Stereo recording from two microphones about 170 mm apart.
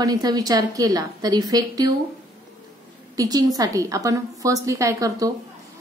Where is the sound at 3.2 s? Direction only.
20° right (ahead or behind).